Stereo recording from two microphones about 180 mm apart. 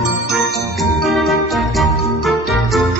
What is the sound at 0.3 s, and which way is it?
Music, centre (ahead or behind).